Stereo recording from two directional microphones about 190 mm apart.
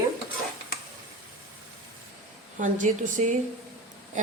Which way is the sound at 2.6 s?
40° right (ahead or behind).